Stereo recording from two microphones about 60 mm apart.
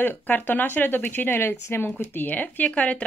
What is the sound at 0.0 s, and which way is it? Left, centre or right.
Speech, left.